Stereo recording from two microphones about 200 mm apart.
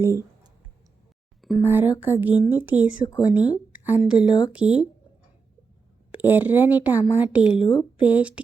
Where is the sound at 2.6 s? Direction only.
10° right (ahead or behind).